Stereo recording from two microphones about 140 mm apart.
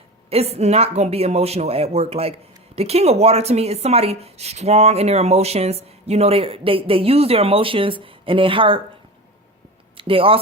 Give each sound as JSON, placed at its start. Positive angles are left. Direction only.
{"t": 0.3, "sound": "speech", "side_deg": -45}
{"t": 10.0, "sound": "speech", "side_deg": -40}